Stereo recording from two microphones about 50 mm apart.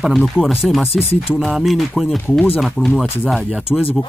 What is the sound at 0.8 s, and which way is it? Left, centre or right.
Speech, left.